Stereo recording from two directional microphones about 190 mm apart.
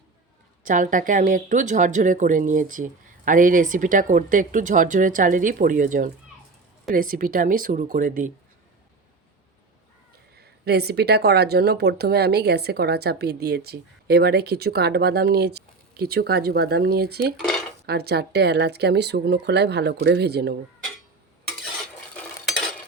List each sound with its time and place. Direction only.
0.6 s a woman's voice: 45° right (ahead or behind)
10.7 s speech: 55° right (ahead or behind)
22.1 s stir: 5° left (ahead or behind)